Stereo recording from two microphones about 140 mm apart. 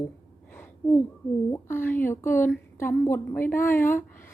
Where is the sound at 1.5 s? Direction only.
15° left (ahead or behind).